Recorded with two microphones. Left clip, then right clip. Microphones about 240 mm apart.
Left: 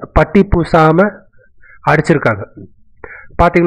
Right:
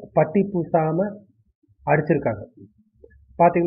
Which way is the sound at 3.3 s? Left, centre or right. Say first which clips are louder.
Left 6 dB; left.